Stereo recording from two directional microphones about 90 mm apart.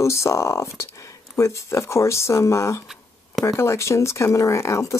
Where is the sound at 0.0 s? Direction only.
30° left (ahead or behind).